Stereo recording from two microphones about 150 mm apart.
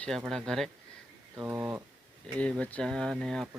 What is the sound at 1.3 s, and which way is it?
Speech, 15° right (ahead or behind).